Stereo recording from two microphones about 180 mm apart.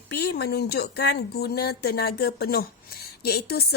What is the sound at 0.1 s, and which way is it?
Speech, 65° left (ahead or behind).